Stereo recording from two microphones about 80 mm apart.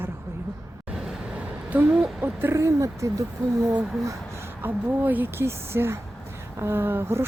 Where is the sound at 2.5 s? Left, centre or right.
Right.